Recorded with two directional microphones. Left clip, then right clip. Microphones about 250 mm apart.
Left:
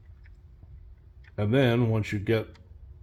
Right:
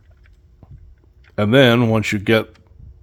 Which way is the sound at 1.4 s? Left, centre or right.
Right.